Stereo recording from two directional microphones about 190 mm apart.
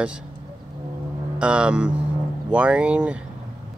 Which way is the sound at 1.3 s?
5° right (ahead or behind).